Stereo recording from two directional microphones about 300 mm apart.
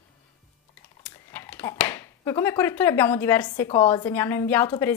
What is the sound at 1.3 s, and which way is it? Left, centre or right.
Speech, centre.